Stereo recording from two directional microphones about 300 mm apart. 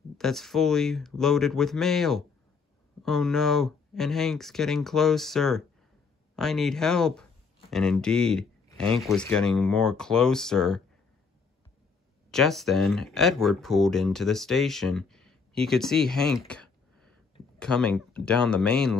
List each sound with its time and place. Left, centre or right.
0.2 s speech: centre
12.3 s speech: centre